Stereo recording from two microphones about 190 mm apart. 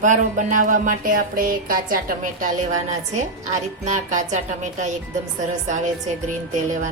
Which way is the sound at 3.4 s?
40° right (ahead or behind).